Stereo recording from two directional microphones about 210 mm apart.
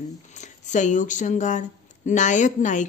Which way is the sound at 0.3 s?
35° left (ahead or behind).